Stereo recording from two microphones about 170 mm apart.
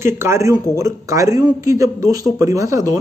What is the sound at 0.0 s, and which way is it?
Speech, 15° right (ahead or behind).